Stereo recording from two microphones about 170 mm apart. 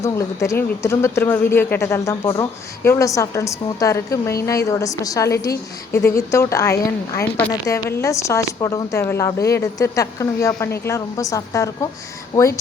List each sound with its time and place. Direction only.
0.0 s a woman's voice: 15° left (ahead or behind)